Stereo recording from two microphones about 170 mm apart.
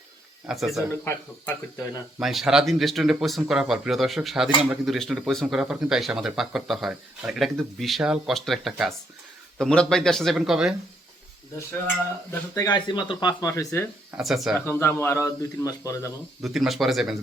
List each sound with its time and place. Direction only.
0.4 s speech: centre (ahead or behind)
1.1 s a man's voice: 15° left (ahead or behind)
2.1 s speech: centre (ahead or behind)
12.3 s speech: 20° left (ahead or behind)
14.2 s speech: centre (ahead or behind)
14.6 s a man's voice: 15° left (ahead or behind)
16.4 s speech: centre (ahead or behind)